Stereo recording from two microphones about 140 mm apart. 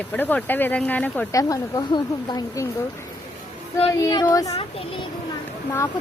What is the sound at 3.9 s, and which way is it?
Speech, 25° left (ahead or behind).